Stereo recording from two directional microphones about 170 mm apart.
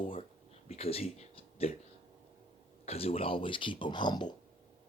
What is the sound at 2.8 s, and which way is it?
Speech, 35° left (ahead or behind).